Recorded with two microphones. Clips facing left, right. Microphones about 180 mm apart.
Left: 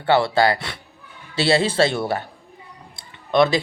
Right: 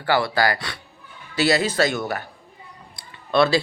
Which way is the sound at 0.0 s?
25° left (ahead or behind).